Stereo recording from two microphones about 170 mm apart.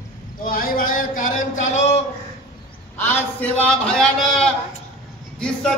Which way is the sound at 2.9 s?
10° left (ahead or behind).